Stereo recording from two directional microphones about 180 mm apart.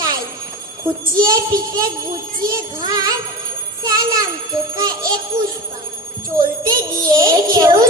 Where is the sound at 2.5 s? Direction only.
20° right (ahead or behind).